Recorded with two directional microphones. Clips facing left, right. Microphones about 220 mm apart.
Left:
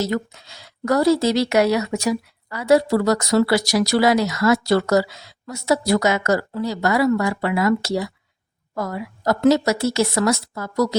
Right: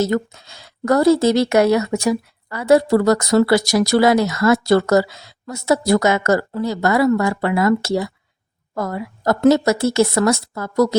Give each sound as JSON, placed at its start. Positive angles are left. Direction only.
{"t": 0.0, "sound": "speech", "side_deg": -50}